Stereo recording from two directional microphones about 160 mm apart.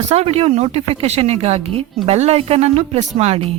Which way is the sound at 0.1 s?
40° right (ahead or behind).